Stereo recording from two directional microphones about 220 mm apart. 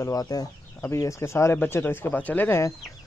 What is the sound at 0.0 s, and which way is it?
Speech, 15° left (ahead or behind).